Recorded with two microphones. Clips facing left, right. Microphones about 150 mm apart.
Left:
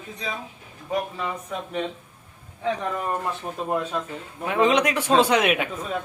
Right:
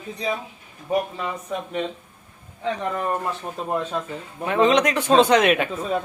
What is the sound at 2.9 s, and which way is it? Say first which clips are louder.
Speech: right 2 dB; 5° right (ahead or behind).